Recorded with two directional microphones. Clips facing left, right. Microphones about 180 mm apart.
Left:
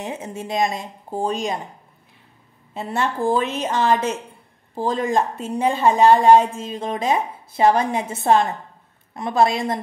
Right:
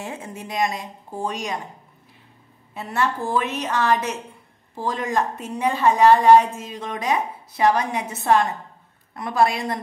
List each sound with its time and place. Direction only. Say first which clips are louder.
0.0 s a woman's voice: left 3 dB; 20° left (ahead or behind)
2.7 s a woman's voice: left 1 dB; 25° left (ahead or behind)